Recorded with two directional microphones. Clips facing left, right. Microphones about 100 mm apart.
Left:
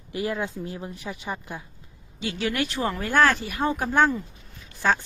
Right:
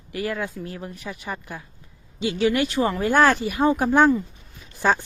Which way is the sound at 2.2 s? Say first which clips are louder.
Right 6 dB; 5° right (ahead or behind).